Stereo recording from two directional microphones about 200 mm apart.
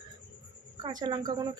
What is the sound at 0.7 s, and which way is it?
Speech, 20° right (ahead or behind).